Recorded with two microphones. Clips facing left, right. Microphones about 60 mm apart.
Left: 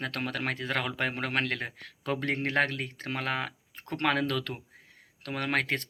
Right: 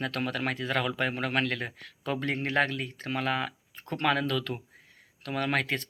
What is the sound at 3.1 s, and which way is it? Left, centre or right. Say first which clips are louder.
Speech: right 3 dB; left.